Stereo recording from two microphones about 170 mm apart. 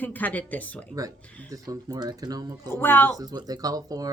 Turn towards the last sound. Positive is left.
turn(degrees=-20)  # may be behind; listen again after turning